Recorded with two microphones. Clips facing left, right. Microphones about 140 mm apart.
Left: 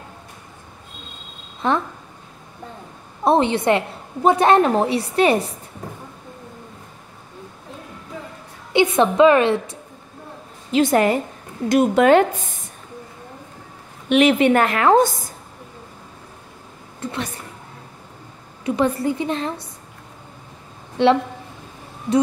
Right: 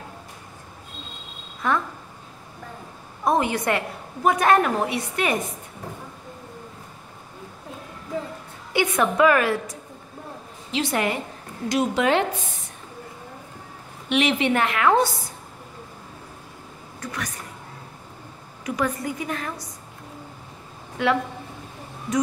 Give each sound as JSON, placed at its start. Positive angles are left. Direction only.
{"t": 1.6, "sound": "a woman's voice", "side_deg": 25}
{"t": 3.3, "sound": "a woman's voice", "side_deg": 25}
{"t": 8.7, "sound": "a woman's voice", "side_deg": 25}
{"t": 10.7, "sound": "a woman's voice", "side_deg": 45}
{"t": 14.0, "sound": "a woman's voice", "side_deg": 45}
{"t": 17.0, "sound": "a woman's voice", "side_deg": 25}
{"t": 18.7, "sound": "a woman's voice", "side_deg": 30}
{"t": 21.0, "sound": "a woman's voice", "side_deg": 30}